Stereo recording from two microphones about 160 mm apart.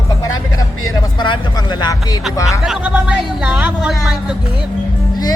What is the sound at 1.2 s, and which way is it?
Speech, 25° left (ahead or behind).